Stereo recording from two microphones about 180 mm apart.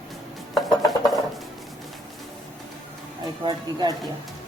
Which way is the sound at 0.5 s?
Centre (ahead or behind).